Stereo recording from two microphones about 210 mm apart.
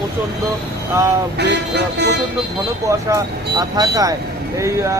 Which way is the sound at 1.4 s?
55° right (ahead or behind).